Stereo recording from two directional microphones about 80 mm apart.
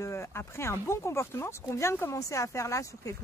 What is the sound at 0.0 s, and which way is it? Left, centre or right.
Speech, left.